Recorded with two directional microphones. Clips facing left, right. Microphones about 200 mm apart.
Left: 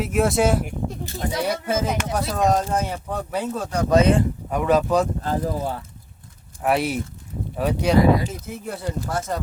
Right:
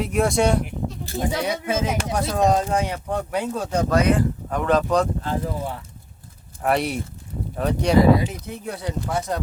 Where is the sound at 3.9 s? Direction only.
25° left (ahead or behind).